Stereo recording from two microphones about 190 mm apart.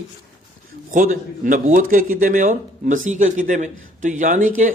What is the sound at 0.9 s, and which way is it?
A man's voice, 45° right (ahead or behind).